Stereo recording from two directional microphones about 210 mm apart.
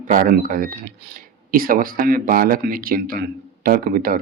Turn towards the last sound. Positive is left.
turn(degrees=-40)  # may be behind; listen again after turning